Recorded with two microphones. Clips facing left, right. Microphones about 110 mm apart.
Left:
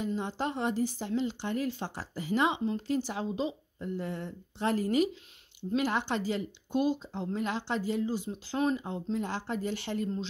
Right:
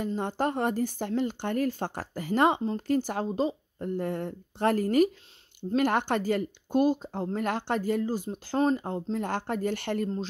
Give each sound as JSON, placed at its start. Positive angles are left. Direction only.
{"t": 0.0, "sound": "speech", "side_deg": -50}